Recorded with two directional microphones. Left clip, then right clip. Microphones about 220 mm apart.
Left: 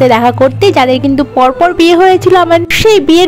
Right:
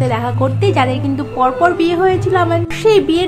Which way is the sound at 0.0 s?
35° left (ahead or behind).